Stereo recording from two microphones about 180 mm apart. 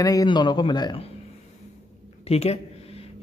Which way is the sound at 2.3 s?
35° left (ahead or behind).